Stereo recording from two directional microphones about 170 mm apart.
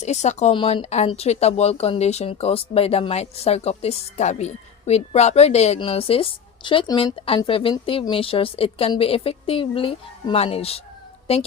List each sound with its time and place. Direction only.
0.0 s speech: 40° left (ahead or behind)